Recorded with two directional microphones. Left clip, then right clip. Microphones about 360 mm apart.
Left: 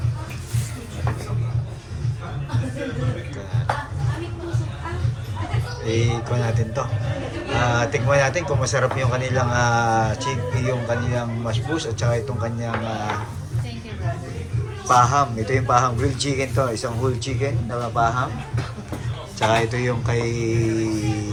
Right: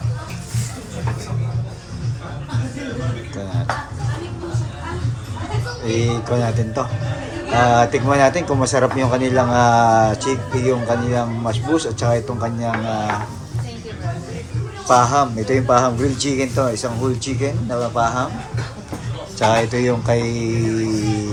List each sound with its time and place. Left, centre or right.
5.8 s a man's voice: centre
14.8 s a man's voice: centre
19.4 s a man's voice: centre